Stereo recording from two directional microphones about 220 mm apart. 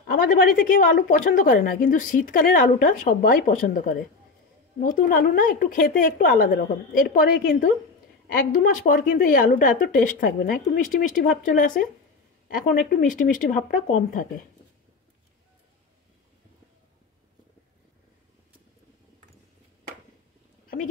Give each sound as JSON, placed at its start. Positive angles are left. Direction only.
{"t": 0.1, "sound": "a woman's voice", "side_deg": 40}